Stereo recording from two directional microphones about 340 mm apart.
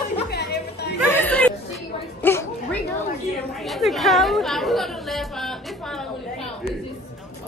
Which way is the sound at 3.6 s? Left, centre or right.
Centre.